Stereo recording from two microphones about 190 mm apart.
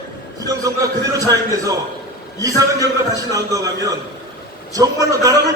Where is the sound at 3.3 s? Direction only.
20° right (ahead or behind).